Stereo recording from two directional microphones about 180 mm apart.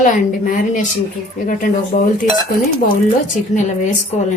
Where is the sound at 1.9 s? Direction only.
40° left (ahead or behind).